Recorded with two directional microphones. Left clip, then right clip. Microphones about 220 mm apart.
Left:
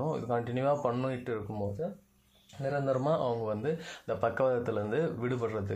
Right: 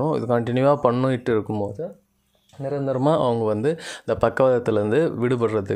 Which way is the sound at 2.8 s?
45° right (ahead or behind).